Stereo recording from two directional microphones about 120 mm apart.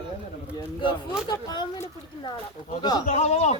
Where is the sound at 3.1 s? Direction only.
70° left (ahead or behind).